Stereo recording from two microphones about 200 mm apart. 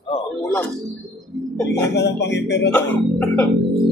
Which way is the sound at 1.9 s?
60° left (ahead or behind).